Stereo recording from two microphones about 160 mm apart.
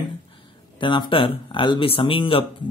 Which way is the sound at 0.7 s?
30° left (ahead or behind).